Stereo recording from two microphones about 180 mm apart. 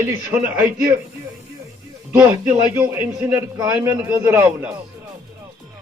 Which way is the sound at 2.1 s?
10° right (ahead or behind).